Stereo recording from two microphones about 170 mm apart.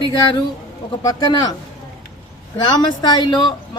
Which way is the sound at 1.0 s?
25° left (ahead or behind).